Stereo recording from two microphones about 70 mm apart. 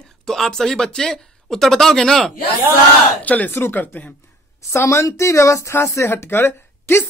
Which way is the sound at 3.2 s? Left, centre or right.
Left.